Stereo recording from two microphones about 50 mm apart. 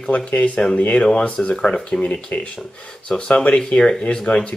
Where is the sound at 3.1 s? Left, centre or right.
Centre.